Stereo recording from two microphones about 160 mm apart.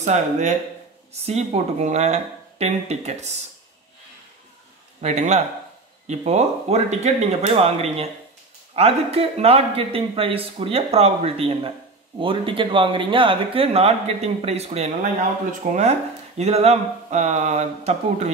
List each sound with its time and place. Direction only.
0.0 s speech: 45° right (ahead or behind)
5.0 s a man's voice: 45° right (ahead or behind)